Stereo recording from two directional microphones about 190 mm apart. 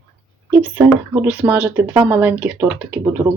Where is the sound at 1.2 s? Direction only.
10° right (ahead or behind).